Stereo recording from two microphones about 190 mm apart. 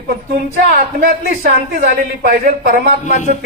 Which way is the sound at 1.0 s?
50° right (ahead or behind).